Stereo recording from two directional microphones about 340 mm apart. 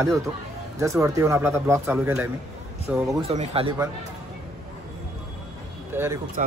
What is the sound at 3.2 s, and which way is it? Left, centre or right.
Speech, centre.